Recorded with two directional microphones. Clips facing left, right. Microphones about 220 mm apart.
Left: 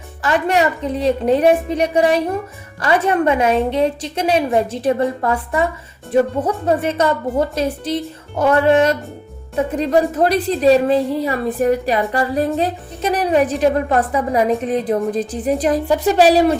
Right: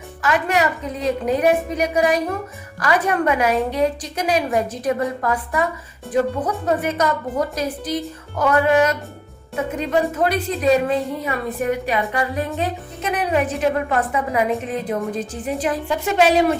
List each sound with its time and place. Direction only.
0.2 s a woman's voice: 30° left (ahead or behind)